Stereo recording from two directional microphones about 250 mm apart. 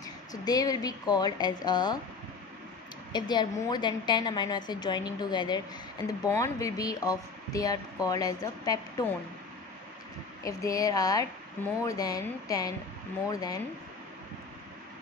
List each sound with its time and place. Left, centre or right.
0.0 s speech: centre
3.1 s speech: centre
10.4 s speech: centre